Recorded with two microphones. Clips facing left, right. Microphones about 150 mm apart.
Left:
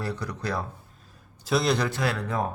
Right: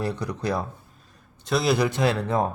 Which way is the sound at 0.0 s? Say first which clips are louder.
Right 4 dB; 20° right (ahead or behind).